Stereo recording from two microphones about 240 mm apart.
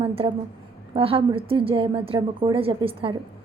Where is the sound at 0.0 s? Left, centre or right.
Right.